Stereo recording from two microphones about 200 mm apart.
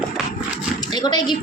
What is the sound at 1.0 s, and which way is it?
Speech, 20° left (ahead or behind).